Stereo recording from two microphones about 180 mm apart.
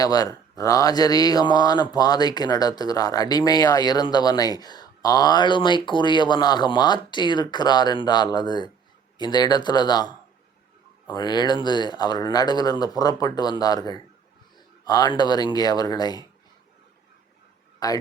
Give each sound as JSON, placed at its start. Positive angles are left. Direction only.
{"t": 0.0, "sound": "speech", "side_deg": 20}
{"t": 11.1, "sound": "speech", "side_deg": 25}
{"t": 17.8, "sound": "speech", "side_deg": 20}